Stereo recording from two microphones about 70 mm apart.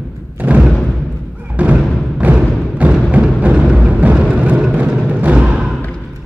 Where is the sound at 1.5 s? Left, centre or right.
Right.